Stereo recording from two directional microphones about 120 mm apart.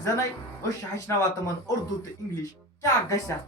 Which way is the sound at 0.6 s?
30° left (ahead or behind).